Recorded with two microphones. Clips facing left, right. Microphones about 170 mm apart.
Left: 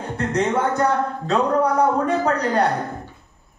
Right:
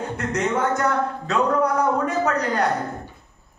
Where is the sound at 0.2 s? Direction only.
35° left (ahead or behind).